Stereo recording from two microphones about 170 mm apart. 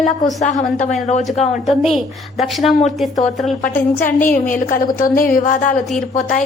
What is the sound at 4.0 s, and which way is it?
A woman's voice, 55° left (ahead or behind).